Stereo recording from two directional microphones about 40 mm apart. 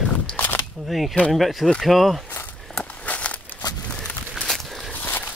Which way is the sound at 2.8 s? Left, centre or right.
Left.